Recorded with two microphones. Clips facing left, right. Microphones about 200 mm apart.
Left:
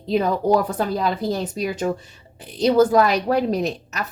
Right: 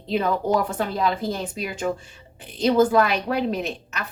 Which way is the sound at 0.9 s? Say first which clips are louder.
Even; 40° left (ahead or behind).